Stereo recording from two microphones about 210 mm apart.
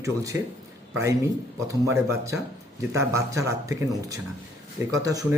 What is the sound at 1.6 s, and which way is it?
Speech, 15° right (ahead or behind).